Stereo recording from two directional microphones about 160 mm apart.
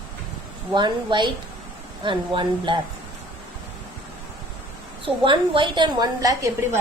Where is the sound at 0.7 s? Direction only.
30° right (ahead or behind).